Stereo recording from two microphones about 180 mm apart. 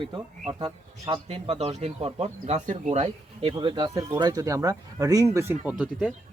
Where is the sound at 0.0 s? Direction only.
30° right (ahead or behind).